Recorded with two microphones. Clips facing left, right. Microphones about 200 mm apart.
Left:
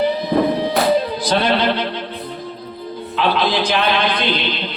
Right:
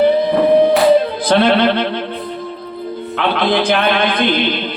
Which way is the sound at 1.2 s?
55° right (ahead or behind).